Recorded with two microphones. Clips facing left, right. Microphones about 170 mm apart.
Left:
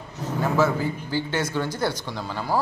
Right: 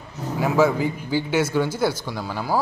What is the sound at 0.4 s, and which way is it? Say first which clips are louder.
A man's voice: right 3 dB; 15° right (ahead or behind).